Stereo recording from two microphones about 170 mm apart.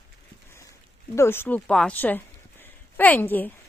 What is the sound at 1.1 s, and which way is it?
Speech, 15° left (ahead or behind).